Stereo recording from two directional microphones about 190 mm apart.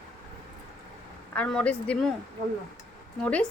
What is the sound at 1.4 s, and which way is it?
Speech, 5° left (ahead or behind).